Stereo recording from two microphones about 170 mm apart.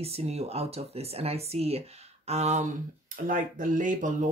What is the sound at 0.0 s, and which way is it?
Speech, 35° right (ahead or behind).